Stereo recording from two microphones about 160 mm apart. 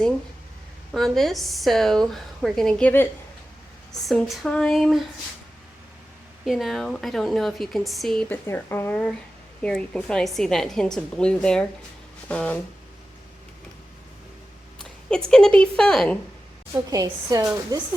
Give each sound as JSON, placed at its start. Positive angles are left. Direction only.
{"t": 0.9, "sound": "a woman's voice", "side_deg": 0}
{"t": 6.4, "sound": "a woman's voice", "side_deg": 0}
{"t": 8.4, "sound": "a woman's voice", "side_deg": 15}
{"t": 15.3, "sound": "a woman's voice", "side_deg": 5}
{"t": 16.7, "sound": "a woman's voice", "side_deg": -20}